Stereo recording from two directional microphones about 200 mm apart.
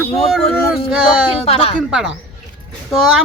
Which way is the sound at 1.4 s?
30° left (ahead or behind).